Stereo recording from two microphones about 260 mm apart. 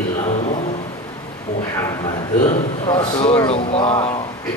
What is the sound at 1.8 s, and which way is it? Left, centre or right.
A man's voice, centre.